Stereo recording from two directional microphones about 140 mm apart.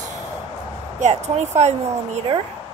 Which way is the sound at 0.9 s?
55° right (ahead or behind).